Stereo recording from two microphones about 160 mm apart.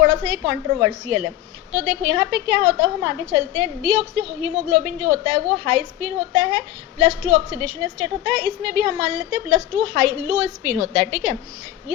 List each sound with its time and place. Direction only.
0.1 s a woman's voice: 30° right (ahead or behind); by 11.3 s 15° right (ahead or behind)